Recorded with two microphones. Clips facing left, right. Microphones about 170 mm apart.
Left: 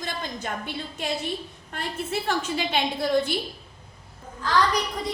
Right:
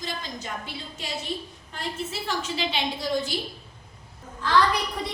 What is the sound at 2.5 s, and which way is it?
Speech, 55° left (ahead or behind).